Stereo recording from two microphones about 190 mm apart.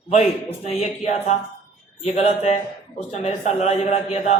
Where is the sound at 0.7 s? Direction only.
35° left (ahead or behind).